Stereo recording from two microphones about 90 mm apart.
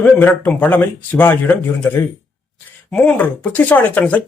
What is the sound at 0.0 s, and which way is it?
Speech, 20° left (ahead or behind).